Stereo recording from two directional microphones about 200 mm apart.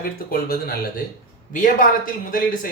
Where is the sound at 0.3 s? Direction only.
50° left (ahead or behind).